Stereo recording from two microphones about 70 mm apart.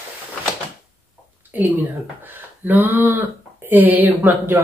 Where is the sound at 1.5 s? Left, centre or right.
Right.